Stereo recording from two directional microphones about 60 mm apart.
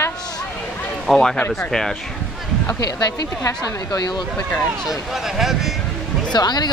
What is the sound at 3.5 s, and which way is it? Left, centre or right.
Speech, left.